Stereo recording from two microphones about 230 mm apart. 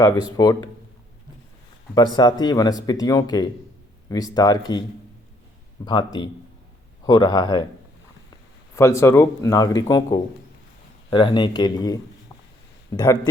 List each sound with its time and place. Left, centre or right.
0.0 s speech: centre
2.1 s speech: centre
5.8 s speech: centre
8.7 s speech: centre